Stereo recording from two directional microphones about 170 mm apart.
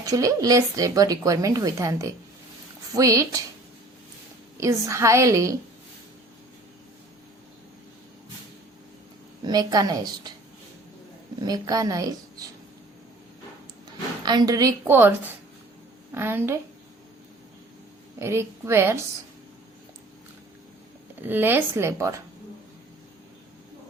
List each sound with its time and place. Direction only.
0.0 s speech: 20° right (ahead or behind)
4.6 s a woman's voice: 15° right (ahead or behind)
9.5 s speech: 20° right (ahead or behind)
11.4 s speech: 20° right (ahead or behind)
14.3 s a woman's voice: 25° right (ahead or behind)
18.2 s a woman's voice: 15° right (ahead or behind)
21.2 s a woman's voice: 10° right (ahead or behind)